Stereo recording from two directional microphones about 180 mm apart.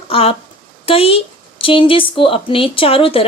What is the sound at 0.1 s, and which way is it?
A woman's voice, 30° left (ahead or behind).